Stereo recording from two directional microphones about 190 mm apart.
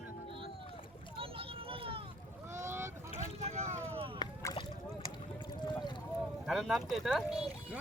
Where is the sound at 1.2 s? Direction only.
30° right (ahead or behind).